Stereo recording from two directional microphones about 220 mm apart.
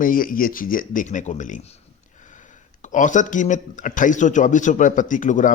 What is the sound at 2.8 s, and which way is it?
Speech, 35° left (ahead or behind).